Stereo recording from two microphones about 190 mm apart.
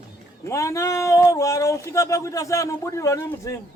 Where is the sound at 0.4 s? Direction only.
15° left (ahead or behind).